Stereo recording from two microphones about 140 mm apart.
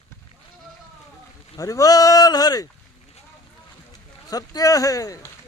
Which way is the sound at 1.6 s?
25° left (ahead or behind).